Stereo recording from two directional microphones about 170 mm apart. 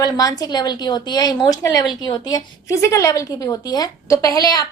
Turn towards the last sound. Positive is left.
turn(degrees=20)  # may be behind; listen again after turning